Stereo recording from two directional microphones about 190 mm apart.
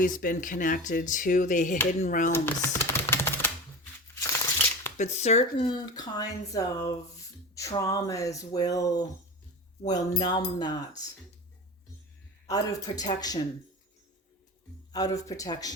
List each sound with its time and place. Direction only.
0.0 s speech: 45° left (ahead or behind)
2.3 s typewriter: 15° left (ahead or behind)
4.9 s speech: 35° left (ahead or behind)
12.5 s speech: 20° left (ahead or behind)
14.9 s speech: 20° left (ahead or behind)